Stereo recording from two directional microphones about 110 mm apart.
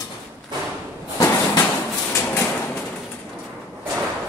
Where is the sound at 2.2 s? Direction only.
20° left (ahead or behind).